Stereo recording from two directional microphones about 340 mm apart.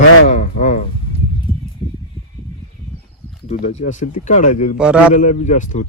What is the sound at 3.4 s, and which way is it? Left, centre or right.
Speech, centre.